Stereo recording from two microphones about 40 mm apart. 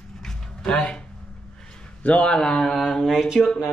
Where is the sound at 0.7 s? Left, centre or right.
Left.